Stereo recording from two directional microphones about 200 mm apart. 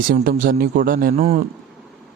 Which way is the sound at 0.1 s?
45° right (ahead or behind).